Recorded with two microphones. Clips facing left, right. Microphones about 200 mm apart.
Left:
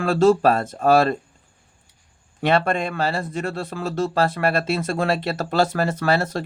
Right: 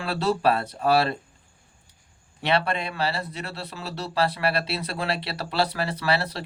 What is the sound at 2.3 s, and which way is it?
Speech, 50° left (ahead or behind).